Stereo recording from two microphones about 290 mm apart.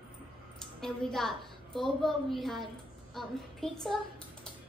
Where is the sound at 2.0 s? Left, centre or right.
Centre.